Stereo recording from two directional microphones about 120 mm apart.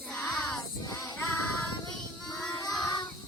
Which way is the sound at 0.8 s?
25° left (ahead or behind).